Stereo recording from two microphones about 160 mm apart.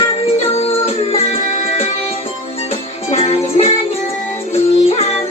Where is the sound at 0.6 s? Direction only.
35° left (ahead or behind).